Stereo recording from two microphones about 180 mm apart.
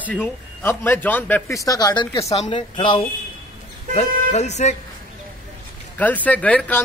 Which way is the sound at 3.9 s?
40° left (ahead or behind).